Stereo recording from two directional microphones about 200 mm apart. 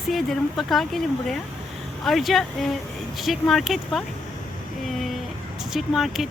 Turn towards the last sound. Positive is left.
turn(degrees=0)  # may be behind; listen again after turning